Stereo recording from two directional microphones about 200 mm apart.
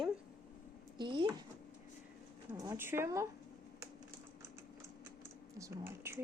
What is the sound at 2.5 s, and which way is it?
Speech, 20° right (ahead or behind).